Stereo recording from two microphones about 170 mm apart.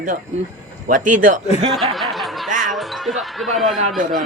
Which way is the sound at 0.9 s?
50° right (ahead or behind).